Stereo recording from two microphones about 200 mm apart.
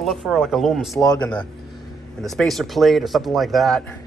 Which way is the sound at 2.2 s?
Centre (ahead or behind).